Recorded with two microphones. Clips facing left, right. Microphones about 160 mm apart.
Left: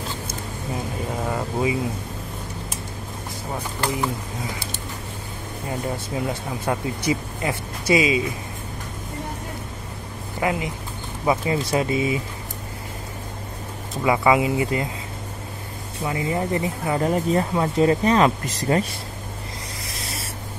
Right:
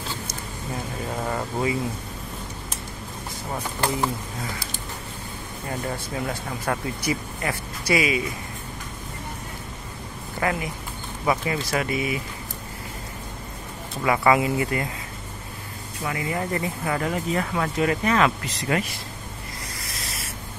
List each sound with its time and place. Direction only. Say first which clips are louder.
1.2 s vehicle: left 2 dB; 10° left (ahead or behind)
6.2 s speech: left 2 dB; 20° left (ahead or behind)
10.4 s speech: left 2 dB; 20° left (ahead or behind)
14.0 s speech: left 1 dB; 15° left (ahead or behind)
16.0 s speech: left 3 dB; 25° left (ahead or behind)
17.0 s speech: left 8 dB; 35° left (ahead or behind)